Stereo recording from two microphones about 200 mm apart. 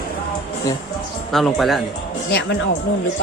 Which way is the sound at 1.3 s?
Centre (ahead or behind).